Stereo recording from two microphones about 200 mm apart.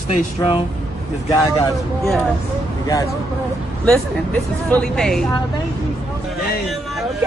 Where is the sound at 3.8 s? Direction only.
5° left (ahead or behind).